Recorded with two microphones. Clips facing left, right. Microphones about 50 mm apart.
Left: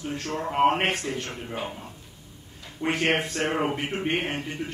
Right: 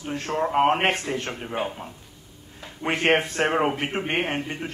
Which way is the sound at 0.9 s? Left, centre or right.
Right.